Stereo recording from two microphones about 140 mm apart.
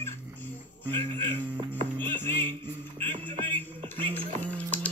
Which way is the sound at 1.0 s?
55° right (ahead or behind).